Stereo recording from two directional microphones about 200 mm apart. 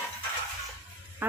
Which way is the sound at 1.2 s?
10° right (ahead or behind).